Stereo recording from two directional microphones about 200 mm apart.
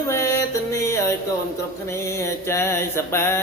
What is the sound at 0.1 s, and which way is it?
Music, 15° left (ahead or behind).